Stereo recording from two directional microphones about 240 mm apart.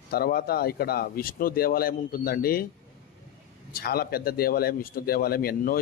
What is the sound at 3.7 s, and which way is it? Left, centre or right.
A man's voice, left.